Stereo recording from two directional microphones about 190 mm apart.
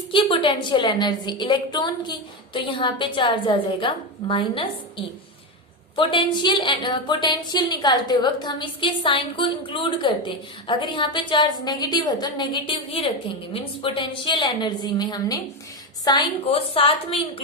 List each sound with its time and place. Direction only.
0.1 s a woman's voice: 25° left (ahead or behind)
6.0 s a woman's voice: 25° left (ahead or behind)